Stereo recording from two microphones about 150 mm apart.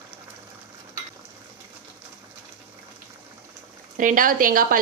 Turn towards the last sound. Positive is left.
turn(degrees=-65)  # may be behind; listen again after turning